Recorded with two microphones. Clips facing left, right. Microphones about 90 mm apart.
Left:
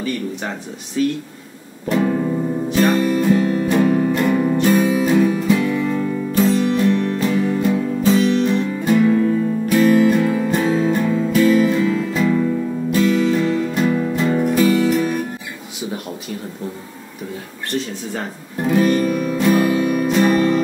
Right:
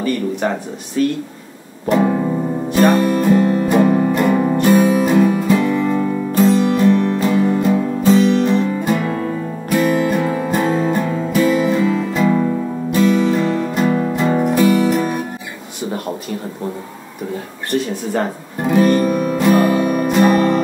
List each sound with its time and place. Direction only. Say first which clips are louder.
0.0 s speech: right 5 dB; centre (ahead or behind)
2.1 s music: right 1 dB; 20° right (ahead or behind)
2.7 s music: right 3 dB; 5° right (ahead or behind)
18.6 s music: right 2 dB; 5° right (ahead or behind)
19.0 s music: right 2 dB; 15° right (ahead or behind)